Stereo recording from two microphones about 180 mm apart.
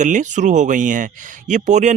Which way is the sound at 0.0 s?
45° right (ahead or behind).